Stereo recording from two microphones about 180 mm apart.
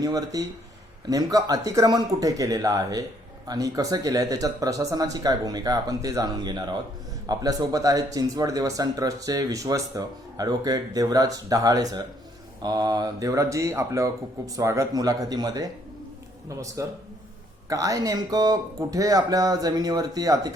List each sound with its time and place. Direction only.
0.0 s speech: 20° right (ahead or behind)